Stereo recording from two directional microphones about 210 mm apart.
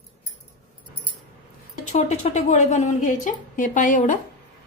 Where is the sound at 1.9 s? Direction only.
35° left (ahead or behind).